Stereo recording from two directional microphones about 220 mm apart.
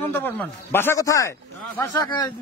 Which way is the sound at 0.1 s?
10° left (ahead or behind).